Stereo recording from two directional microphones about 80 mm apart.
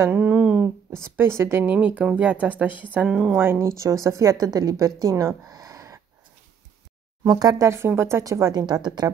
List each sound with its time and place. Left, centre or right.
0.1 s speech: centre
0.9 s speech: right
3.1 s a woman's voice: centre
3.3 s speech: right
5.5 s a sound: right
7.2 s speech: right
7.7 s speech: right
8.2 s speech: right